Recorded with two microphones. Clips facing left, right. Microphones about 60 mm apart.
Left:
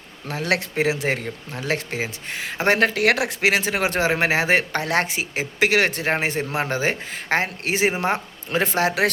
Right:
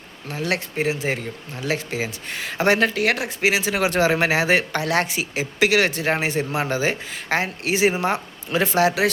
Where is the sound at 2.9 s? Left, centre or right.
Left.